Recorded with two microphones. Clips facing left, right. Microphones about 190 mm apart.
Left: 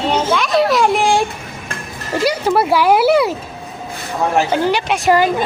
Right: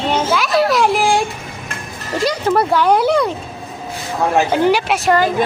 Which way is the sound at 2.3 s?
10° left (ahead or behind).